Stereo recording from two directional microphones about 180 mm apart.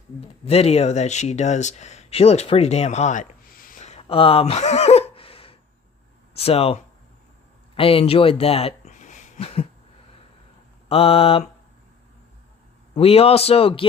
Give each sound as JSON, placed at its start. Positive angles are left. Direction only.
{"t": 0.4, "sound": "speech", "side_deg": 35}
{"t": 10.8, "sound": "speech", "side_deg": 30}
{"t": 13.0, "sound": "speech", "side_deg": 35}